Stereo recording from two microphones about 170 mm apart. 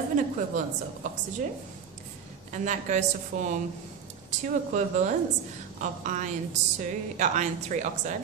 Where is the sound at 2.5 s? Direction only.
45° right (ahead or behind).